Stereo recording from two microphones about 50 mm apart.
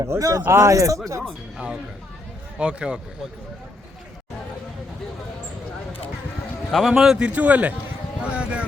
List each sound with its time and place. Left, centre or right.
0.0 s speech: right
2.6 s a man's voice: right
6.7 s a man's voice: centre
6.9 s a man's voice: centre
7.3 s a man's voice: right